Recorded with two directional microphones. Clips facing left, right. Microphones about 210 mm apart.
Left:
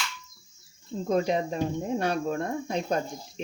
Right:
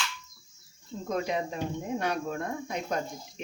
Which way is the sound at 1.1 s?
30° left (ahead or behind).